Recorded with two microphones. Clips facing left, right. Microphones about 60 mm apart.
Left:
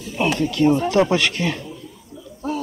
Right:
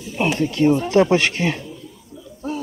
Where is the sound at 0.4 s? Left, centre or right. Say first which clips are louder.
Even; right.